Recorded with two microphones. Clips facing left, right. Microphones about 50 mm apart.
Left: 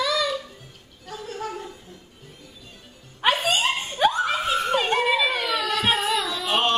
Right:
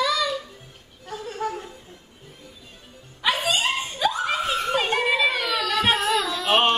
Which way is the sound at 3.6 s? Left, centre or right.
Left.